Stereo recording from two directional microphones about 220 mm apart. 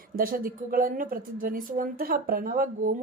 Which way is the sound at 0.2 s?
40° right (ahead or behind).